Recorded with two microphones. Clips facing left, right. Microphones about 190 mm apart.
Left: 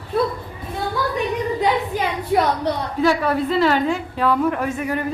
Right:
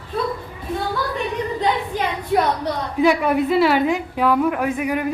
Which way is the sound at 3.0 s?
15° right (ahead or behind).